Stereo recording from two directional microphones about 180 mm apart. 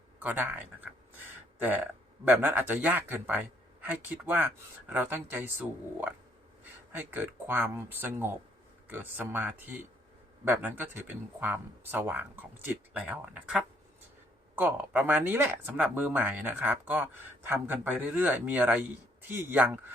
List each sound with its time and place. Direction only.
0.2 s speech: 10° right (ahead or behind)